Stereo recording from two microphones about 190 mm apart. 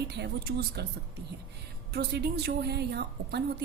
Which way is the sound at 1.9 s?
60° right (ahead or behind).